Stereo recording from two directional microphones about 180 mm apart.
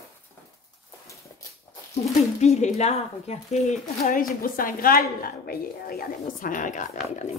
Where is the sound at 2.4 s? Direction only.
40° left (ahead or behind).